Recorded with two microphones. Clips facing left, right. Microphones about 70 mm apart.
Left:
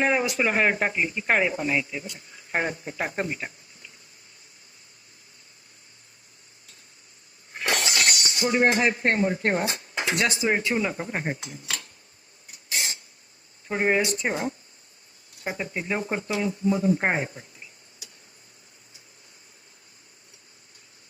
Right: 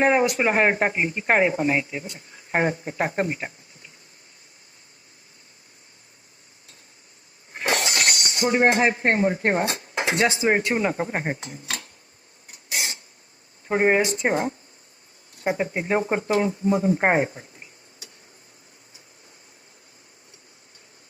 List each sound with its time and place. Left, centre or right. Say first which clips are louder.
0.0 s speech: right 4 dB; right
7.5 s a sound: right 2 dB; right
8.3 s speech: right 3 dB; right
13.7 s speech: right 4 dB; right
15.5 s speech: right 4 dB; right